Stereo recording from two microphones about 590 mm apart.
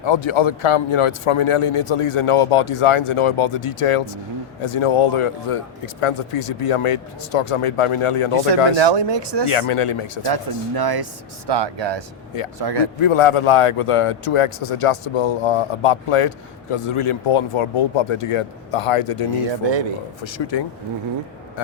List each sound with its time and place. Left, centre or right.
0.0 s a man's voice: left
8.8 s speech: right
9.5 s a man's voice: left
10.2 s speech: right
13.0 s a man's voice: left
20.2 s speech: left